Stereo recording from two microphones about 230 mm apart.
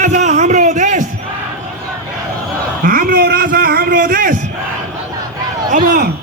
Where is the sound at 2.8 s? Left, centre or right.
Right.